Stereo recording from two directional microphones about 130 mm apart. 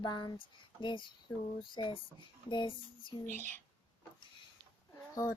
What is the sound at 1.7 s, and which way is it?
Speech, 40° left (ahead or behind).